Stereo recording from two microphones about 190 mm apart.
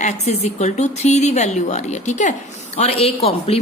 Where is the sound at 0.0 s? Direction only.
35° left (ahead or behind).